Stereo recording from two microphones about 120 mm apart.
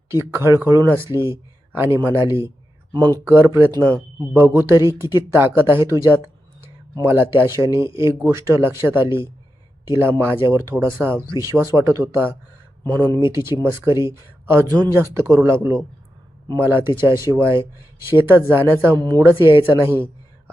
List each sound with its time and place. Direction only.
0.1 s speech: 25° right (ahead or behind)
2.9 s speech: 40° right (ahead or behind)
3.2 s speech: 20° right (ahead or behind)
12.8 s speech: 35° right (ahead or behind)
18.9 s speech: 35° right (ahead or behind)
19.2 s speech: 20° right (ahead or behind)